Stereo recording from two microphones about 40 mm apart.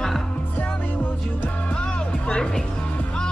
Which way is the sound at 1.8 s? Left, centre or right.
Left.